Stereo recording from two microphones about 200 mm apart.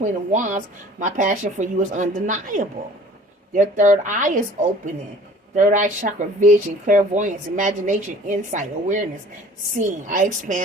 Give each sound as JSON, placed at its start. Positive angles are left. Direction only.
{"t": 0.0, "sound": "speech", "side_deg": -40}
{"t": 5.5, "sound": "speech", "side_deg": -40}